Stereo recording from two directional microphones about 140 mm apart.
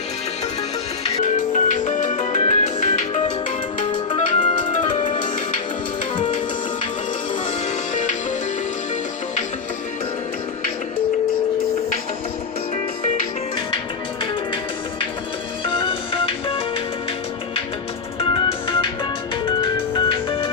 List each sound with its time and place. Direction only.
1.0 s music: 60° left (ahead or behind)
3.9 s music: 35° left (ahead or behind)
5.0 s music: 65° left (ahead or behind)
15.8 s music: 40° left (ahead or behind)
18.2 s music: 40° left (ahead or behind)